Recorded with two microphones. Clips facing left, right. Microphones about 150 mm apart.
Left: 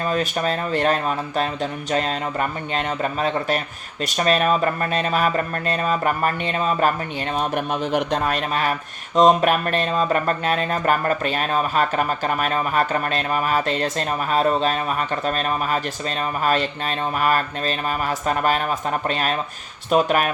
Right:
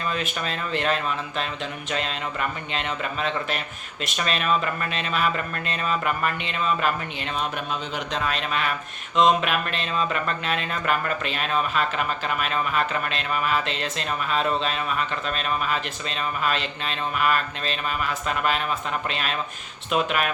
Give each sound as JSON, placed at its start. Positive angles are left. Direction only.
{"t": 0.0, "sound": "speech", "side_deg": 40}
{"t": 7.3, "sound": "speech", "side_deg": 55}